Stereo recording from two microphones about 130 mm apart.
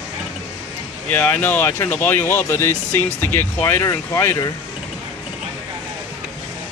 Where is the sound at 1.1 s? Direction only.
15° left (ahead or behind).